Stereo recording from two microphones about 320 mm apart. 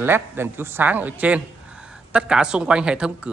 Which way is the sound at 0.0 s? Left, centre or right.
Centre.